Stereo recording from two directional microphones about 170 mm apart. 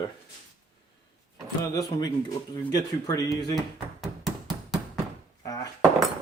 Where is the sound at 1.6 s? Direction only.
20° left (ahead or behind).